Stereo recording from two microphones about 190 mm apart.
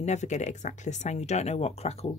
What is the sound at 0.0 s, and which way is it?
Speech, 40° left (ahead or behind).